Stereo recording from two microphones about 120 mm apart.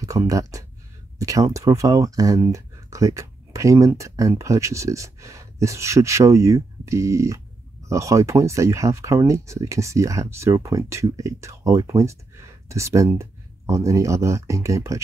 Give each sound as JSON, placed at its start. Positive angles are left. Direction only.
{"t": 0.0, "sound": "speech", "side_deg": -30}